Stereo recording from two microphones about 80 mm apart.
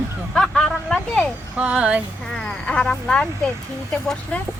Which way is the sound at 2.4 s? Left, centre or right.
Centre.